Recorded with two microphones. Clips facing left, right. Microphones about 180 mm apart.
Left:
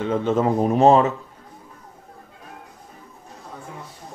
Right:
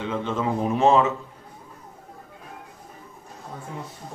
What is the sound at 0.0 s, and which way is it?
Speech, 40° left (ahead or behind).